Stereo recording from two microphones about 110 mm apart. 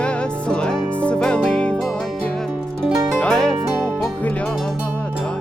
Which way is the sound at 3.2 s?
5° left (ahead or behind).